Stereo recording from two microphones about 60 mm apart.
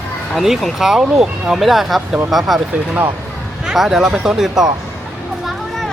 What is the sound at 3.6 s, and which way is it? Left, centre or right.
Speech, centre.